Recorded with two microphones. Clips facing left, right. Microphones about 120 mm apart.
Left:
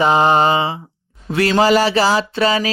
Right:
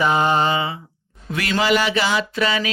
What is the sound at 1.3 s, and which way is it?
Speech, 35° left (ahead or behind).